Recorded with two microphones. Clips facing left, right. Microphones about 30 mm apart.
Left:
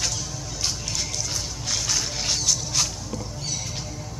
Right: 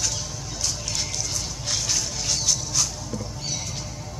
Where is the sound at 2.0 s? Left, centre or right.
Left.